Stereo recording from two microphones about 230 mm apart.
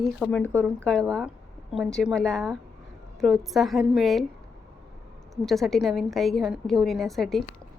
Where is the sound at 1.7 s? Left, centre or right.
Centre.